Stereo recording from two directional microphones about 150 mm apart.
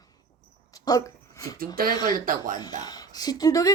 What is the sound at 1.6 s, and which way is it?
Speech, 75° right (ahead or behind).